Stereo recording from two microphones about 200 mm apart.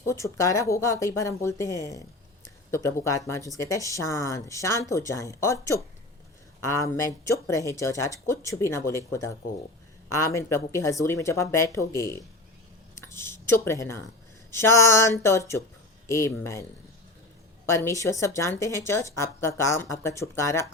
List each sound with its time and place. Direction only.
0.1 s speech: 15° left (ahead or behind)
17.7 s speech: 15° left (ahead or behind)